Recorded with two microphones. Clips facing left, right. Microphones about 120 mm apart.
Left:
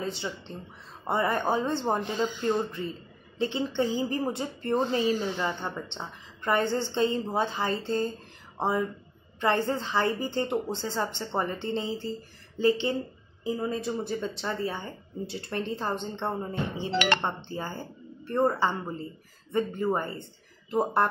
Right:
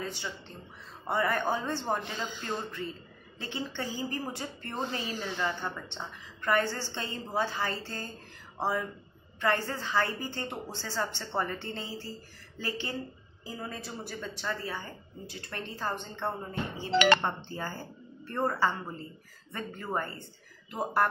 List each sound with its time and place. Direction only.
0.0 s speech: 25° left (ahead or behind)
3.3 s a woman's voice: 20° left (ahead or behind)